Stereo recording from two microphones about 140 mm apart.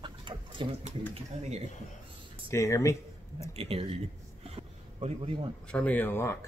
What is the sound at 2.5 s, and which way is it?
Speech, 20° left (ahead or behind).